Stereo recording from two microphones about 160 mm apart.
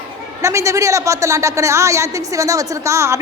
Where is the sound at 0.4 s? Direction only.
20° right (ahead or behind).